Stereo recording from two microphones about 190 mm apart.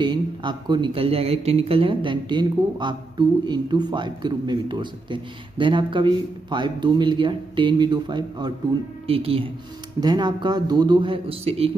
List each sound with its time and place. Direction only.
0.0 s speech: 25° right (ahead or behind)